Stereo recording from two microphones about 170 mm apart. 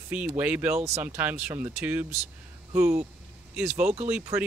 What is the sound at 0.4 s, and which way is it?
Speech, 10° right (ahead or behind).